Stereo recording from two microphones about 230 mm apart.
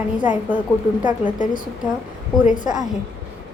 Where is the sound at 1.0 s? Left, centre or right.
Centre.